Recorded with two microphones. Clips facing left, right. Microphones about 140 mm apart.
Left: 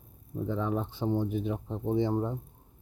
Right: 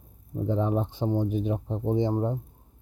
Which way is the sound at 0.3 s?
20° right (ahead or behind).